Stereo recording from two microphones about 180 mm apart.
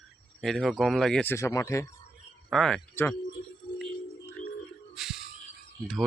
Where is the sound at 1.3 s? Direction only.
15° left (ahead or behind).